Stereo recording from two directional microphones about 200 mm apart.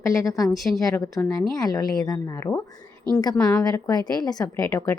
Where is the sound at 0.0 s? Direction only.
15° left (ahead or behind).